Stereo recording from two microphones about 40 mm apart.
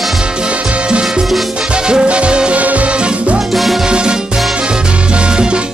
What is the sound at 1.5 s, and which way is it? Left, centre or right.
Music, right.